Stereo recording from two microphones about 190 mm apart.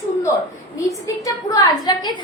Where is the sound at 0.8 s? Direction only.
20° left (ahead or behind).